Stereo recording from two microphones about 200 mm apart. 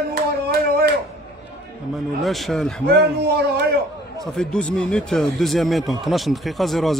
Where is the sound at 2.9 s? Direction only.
55° right (ahead or behind).